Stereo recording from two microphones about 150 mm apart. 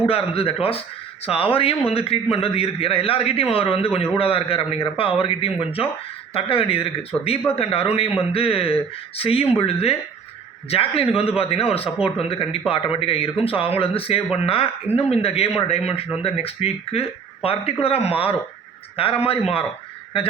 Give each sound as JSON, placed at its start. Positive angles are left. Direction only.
{"t": 0.0, "sound": "speech", "side_deg": 40}